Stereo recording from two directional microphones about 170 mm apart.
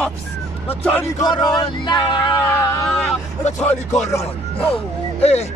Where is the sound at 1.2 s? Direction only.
25° left (ahead or behind).